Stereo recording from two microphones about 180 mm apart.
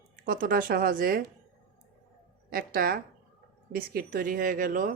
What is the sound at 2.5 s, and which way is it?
Speech, 55° right (ahead or behind).